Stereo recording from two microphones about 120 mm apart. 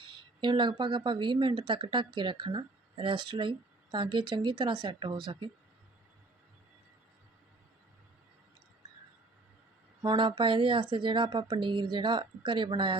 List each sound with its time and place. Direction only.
0.0 s speech: 40° right (ahead or behind)
10.0 s speech: 40° right (ahead or behind)